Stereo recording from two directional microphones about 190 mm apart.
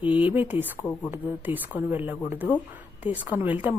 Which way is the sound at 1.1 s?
10° right (ahead or behind).